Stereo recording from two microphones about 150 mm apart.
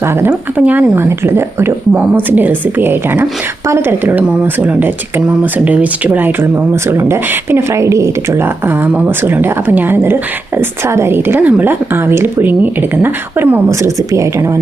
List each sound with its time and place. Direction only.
0.2 s speech: 15° right (ahead or behind)